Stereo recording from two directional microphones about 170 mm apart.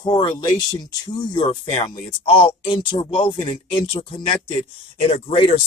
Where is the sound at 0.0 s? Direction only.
25° left (ahead or behind).